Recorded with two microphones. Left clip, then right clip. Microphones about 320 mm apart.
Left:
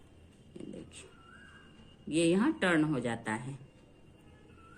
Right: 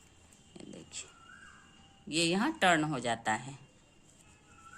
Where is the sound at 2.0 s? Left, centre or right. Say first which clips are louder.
Left 2 dB; right.